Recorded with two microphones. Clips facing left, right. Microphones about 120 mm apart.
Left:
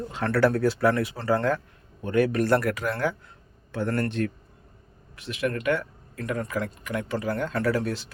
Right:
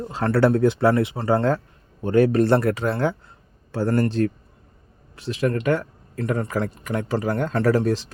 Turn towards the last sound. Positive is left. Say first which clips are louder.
# right 6 dB
turn(degrees=-40)  # may be behind; listen again after turning